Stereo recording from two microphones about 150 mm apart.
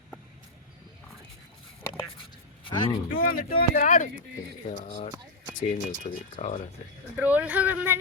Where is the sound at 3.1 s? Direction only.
70° left (ahead or behind); by 5.1 s 55° left (ahead or behind).